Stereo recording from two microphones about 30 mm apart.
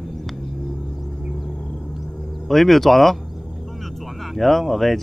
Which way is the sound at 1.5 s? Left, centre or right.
Left.